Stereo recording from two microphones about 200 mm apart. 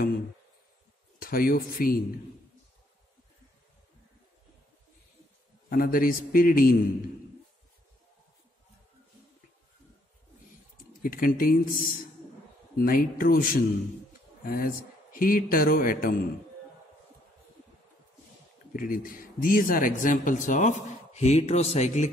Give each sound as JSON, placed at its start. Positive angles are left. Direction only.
{"t": 1.2, "sound": "a man's voice", "side_deg": 45}
{"t": 5.7, "sound": "a man's voice", "side_deg": 45}
{"t": 10.8, "sound": "a man's voice", "side_deg": 45}
{"t": 18.7, "sound": "speech", "side_deg": 45}